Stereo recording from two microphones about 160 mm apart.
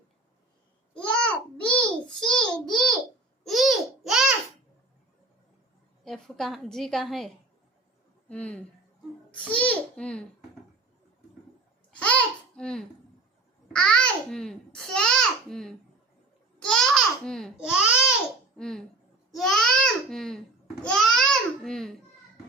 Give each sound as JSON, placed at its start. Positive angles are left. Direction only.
{"t": 0.9, "sound": "babbling", "side_deg": 10}
{"t": 1.5, "sound": "a sound", "side_deg": 5}
{"t": 3.4, "sound": "babbling", "side_deg": 0}
{"t": 6.1, "sound": "a woman's voice", "side_deg": 0}
{"t": 8.3, "sound": "a child's voice", "side_deg": 5}
{"t": 11.9, "sound": "babbling", "side_deg": 10}
{"t": 13.7, "sound": "a child's voice", "side_deg": 5}
{"t": 20.8, "sound": "babbling", "side_deg": 5}